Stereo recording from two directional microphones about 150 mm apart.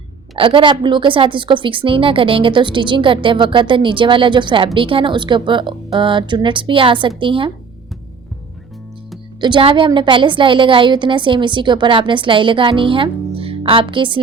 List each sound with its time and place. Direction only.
0.3 s a woman's voice: 35° right (ahead or behind)
9.4 s a woman's voice: 35° right (ahead or behind)